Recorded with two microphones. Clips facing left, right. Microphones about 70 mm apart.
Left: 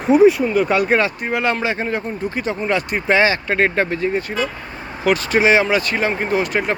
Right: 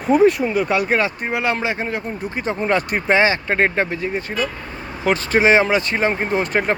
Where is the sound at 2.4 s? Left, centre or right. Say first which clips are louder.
Right 3 dB; right.